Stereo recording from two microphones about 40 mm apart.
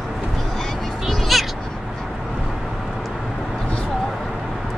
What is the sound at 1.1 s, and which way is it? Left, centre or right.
Cat, centre.